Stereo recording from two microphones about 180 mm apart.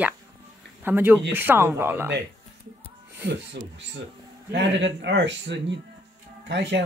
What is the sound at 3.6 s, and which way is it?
Speech, 65° right (ahead or behind).